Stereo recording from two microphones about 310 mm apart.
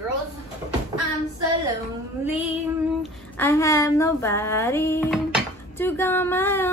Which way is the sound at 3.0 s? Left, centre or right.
Centre.